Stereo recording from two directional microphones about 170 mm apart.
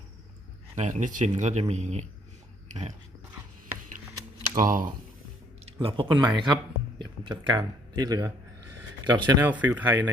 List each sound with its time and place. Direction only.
0.8 s speech: 45° right (ahead or behind)
4.5 s speech: 55° right (ahead or behind)
5.8 s speech: 30° right (ahead or behind)
9.4 s speech: 10° right (ahead or behind)